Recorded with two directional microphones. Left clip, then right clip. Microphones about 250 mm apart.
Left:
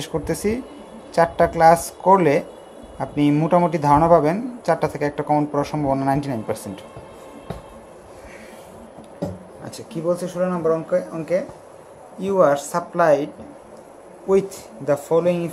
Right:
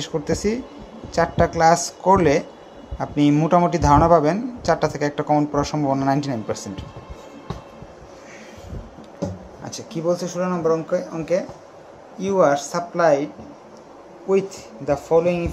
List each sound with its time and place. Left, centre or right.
0.0 s speech: centre
9.7 s speech: centre
14.9 s speech: centre